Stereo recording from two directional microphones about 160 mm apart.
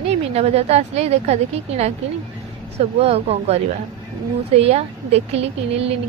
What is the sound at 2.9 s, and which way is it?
A woman's voice, 40° right (ahead or behind).